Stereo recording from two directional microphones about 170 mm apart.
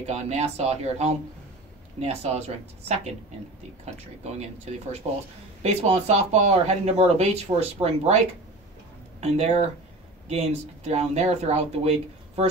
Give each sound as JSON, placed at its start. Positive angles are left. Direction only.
{"t": 0.0, "sound": "speech", "side_deg": -40}
{"t": 5.1, "sound": "speech", "side_deg": -40}
{"t": 9.2, "sound": "speech", "side_deg": -40}